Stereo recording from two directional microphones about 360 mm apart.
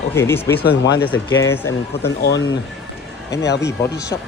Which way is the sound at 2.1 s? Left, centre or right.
Left.